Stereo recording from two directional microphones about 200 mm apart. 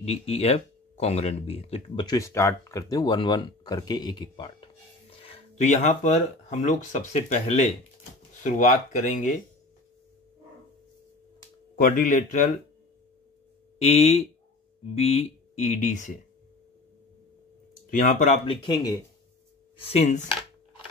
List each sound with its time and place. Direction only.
0.0 s speech: 30° left (ahead or behind)
11.7 s speech: 45° left (ahead or behind)
13.7 s speech: 30° left (ahead or behind)
17.8 s speech: 40° left (ahead or behind)
18.4 s speech: 25° left (ahead or behind)